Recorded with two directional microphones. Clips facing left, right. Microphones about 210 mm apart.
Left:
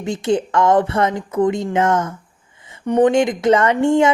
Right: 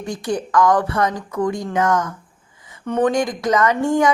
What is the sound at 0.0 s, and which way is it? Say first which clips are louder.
A woman's voice: left 5 dB; 25° left (ahead or behind).